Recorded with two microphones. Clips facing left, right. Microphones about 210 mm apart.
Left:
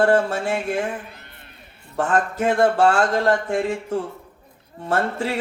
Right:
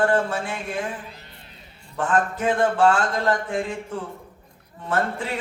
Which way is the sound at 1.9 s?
40° left (ahead or behind).